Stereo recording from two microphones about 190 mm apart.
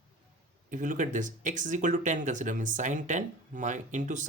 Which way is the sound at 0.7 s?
45° right (ahead or behind).